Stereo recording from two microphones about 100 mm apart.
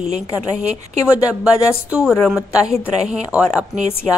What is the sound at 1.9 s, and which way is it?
A woman's voice, 5° right (ahead or behind).